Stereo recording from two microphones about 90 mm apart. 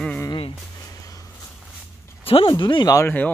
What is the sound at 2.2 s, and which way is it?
Speech, 90° left.